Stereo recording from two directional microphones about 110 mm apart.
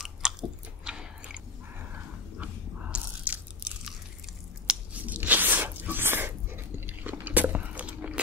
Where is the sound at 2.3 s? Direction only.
15° right (ahead or behind).